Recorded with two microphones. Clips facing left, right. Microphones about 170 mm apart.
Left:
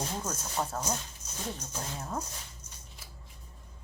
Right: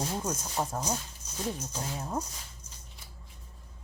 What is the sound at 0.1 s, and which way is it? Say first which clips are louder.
Speech: right 3 dB; 10° right (ahead or behind).